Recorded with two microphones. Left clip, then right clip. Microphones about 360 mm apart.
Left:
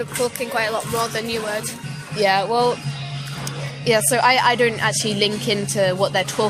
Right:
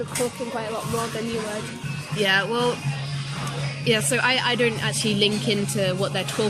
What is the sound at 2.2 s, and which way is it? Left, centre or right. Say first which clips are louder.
Speech: left 4 dB; centre.